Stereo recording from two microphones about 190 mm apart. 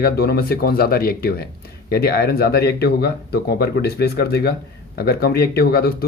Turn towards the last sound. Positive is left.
turn(degrees=55)  # may be behind; listen again after turning